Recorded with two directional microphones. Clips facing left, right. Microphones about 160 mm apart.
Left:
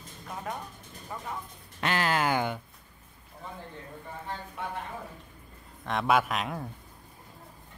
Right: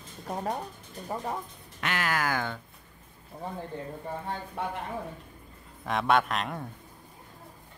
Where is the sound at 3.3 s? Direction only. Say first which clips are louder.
Right 7 dB; 35° right (ahead or behind).